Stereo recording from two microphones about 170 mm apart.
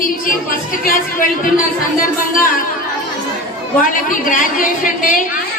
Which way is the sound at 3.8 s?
55° left (ahead or behind).